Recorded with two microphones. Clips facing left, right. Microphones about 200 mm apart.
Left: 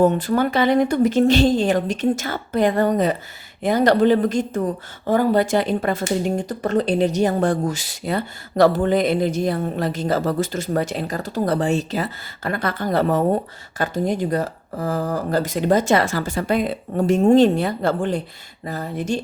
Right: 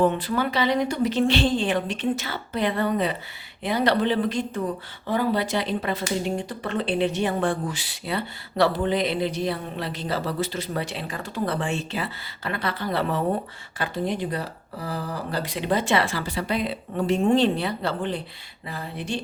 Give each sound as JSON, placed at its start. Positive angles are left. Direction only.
{"t": 0.0, "sound": "speech", "side_deg": 45}